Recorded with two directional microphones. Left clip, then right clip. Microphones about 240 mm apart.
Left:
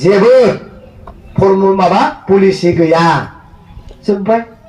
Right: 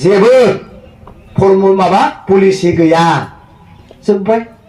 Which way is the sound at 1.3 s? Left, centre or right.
Right.